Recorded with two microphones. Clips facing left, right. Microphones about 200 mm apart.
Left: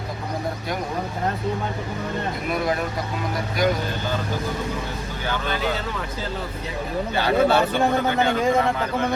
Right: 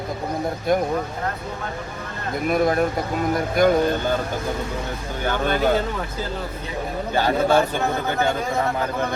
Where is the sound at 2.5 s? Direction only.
50° right (ahead or behind).